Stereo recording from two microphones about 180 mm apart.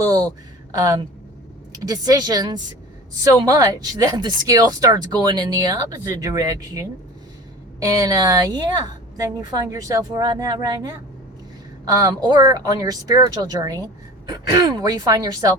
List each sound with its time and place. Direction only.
0.0 s speech: 20° right (ahead or behind)
11.9 s speech: 20° right (ahead or behind)